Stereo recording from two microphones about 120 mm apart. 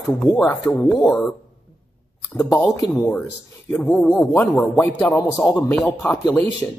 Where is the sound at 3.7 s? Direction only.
15° left (ahead or behind).